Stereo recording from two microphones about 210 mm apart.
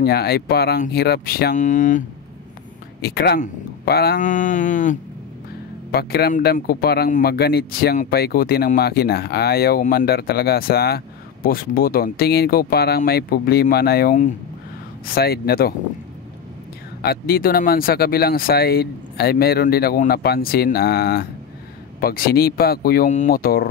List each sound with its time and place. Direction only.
0.0 s speech: 50° left (ahead or behind)
3.0 s speech: 50° left (ahead or behind)
5.9 s speech: 50° left (ahead or behind)
17.0 s speech: 45° left (ahead or behind)